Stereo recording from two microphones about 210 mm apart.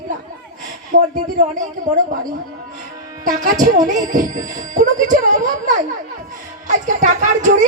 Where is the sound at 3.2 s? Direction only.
40° right (ahead or behind).